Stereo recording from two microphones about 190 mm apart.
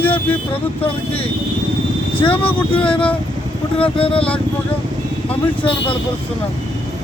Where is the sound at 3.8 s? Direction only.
30° left (ahead or behind).